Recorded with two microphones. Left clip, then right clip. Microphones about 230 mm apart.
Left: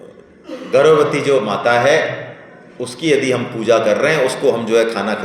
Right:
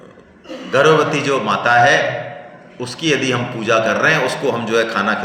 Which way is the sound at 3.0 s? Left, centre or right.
Right.